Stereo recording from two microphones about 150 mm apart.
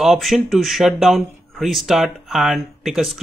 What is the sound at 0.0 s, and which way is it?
Speech, centre (ahead or behind).